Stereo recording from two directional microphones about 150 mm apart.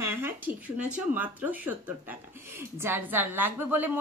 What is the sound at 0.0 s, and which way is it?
A woman's voice, 15° right (ahead or behind).